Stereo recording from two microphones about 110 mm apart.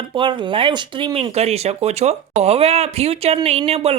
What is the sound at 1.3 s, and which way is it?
Speech, 75° right (ahead or behind).